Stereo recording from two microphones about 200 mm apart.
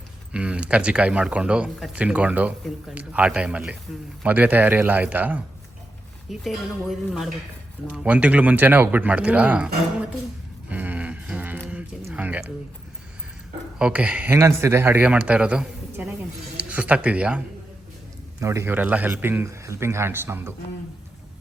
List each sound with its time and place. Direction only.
0.3 s speech: 5° right (ahead or behind)
6.4 s speech: centre (ahead or behind)
10.7 s a sound: 10° right (ahead or behind)
13.7 s speech: 5° right (ahead or behind)